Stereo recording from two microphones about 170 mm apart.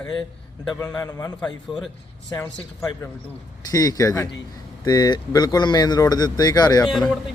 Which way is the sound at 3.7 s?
20° left (ahead or behind).